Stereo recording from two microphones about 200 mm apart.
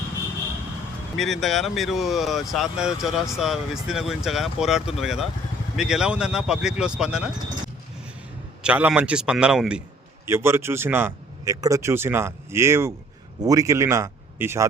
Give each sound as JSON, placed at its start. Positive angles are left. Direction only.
{"t": 1.1, "sound": "speech", "side_deg": 0}
{"t": 8.6, "sound": "speech", "side_deg": -5}